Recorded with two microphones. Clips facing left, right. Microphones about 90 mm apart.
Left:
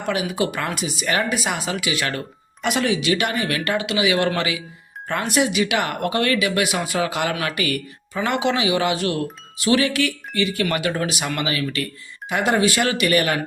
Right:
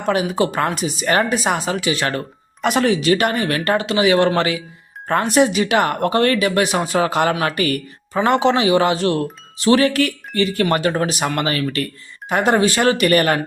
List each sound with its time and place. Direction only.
0.0 s speech: 35° right (ahead or behind)